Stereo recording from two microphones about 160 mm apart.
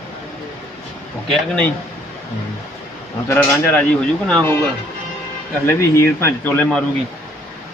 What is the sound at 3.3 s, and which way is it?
Speech, 5° left (ahead or behind).